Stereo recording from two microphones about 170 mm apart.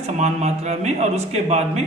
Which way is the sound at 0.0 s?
40° right (ahead or behind).